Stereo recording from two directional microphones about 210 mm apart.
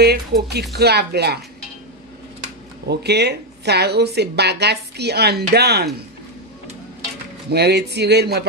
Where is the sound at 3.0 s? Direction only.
50° right (ahead or behind).